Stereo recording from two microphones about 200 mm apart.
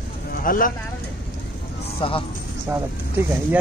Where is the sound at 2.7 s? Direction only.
10° right (ahead or behind).